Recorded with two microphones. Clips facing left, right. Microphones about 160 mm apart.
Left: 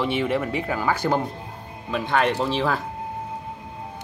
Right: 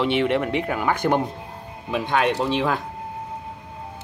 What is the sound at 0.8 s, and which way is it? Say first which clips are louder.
Speech: right 1 dB; 15° right (ahead or behind).